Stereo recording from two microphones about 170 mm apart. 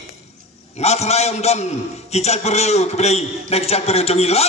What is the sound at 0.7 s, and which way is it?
A man's voice, 40° left (ahead or behind).